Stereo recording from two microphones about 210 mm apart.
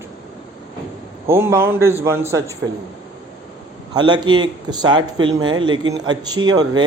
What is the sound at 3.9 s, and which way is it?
A woman's voice, 20° right (ahead or behind).